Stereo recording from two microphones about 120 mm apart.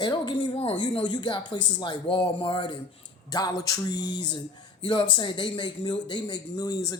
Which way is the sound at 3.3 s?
30° left (ahead or behind).